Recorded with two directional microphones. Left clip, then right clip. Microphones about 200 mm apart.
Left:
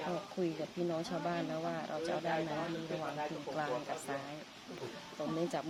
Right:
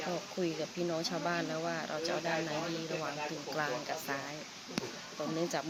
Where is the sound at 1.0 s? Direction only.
5° right (ahead or behind).